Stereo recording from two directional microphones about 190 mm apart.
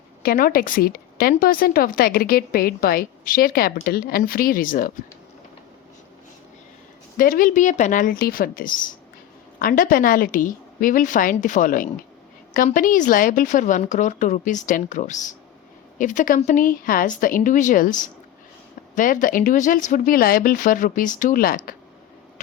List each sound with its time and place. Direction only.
0.2 s speech: 50° left (ahead or behind)
7.2 s a woman's voice: 45° left (ahead or behind)
18.9 s speech: 45° left (ahead or behind)